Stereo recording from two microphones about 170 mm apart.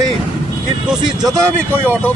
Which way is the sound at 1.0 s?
20° right (ahead or behind).